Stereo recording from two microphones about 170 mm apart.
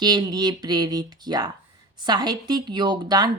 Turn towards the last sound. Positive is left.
turn(degrees=-25)  # may be behind; listen again after turning